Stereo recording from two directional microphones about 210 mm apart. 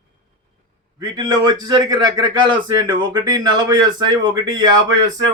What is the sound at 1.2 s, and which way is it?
Speech, 20° right (ahead or behind).